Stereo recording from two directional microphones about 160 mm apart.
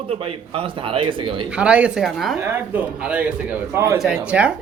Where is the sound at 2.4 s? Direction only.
15° right (ahead or behind).